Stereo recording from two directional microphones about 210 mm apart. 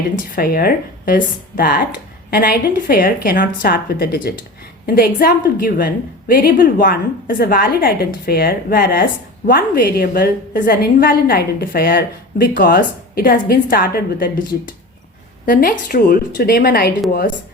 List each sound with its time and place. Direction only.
0.3 s a woman's voice: 45° left (ahead or behind)
15.4 s a woman's voice: 40° left (ahead or behind)